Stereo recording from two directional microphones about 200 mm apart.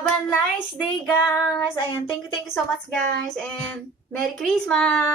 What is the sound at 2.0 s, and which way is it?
Speech, 25° left (ahead or behind).